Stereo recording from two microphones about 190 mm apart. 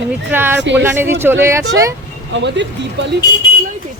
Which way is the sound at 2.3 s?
70° right (ahead or behind).